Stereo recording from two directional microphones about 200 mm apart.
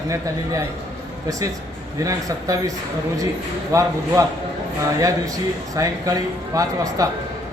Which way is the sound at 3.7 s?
15° right (ahead or behind).